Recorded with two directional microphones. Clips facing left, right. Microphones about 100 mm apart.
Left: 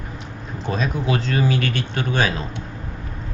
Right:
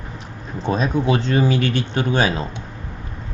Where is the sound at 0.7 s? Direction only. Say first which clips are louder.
Right 4 dB; 30° right (ahead or behind).